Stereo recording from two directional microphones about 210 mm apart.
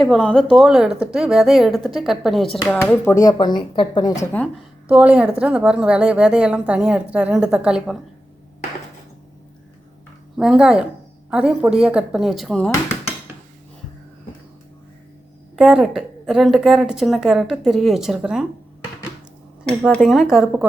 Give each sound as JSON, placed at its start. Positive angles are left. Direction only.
{"t": 0.0, "sound": "a woman's voice", "side_deg": 0}
{"t": 3.1, "sound": "a woman's voice", "side_deg": 15}
{"t": 4.9, "sound": "a woman's voice", "side_deg": -5}
{"t": 10.3, "sound": "a woman's voice", "side_deg": 0}
{"t": 15.5, "sound": "a woman's voice", "side_deg": -5}
{"t": 19.8, "sound": "a woman's voice", "side_deg": 0}